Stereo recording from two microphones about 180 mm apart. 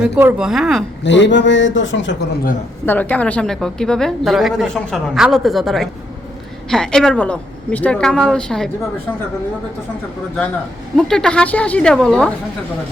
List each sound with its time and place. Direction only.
0.0 s a woman's voice: 5° right (ahead or behind)
1.0 s speech: 80° left
2.8 s a woman's voice: 10° left (ahead or behind)
10.9 s a woman's voice: 5° left (ahead or behind)